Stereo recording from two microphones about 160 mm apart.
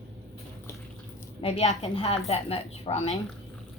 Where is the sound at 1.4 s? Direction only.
35° left (ahead or behind).